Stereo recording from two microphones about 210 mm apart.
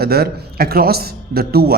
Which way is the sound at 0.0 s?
50° right (ahead or behind).